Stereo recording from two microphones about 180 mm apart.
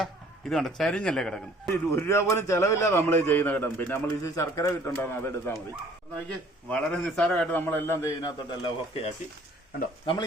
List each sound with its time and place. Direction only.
0.0 s speech: centre (ahead or behind)
1.7 s a man's voice: 15° left (ahead or behind)
6.7 s a man's voice: 5° left (ahead or behind)
8.4 s speech: 25° left (ahead or behind)